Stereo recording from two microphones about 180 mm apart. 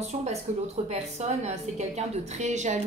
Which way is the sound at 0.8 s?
40° right (ahead or behind).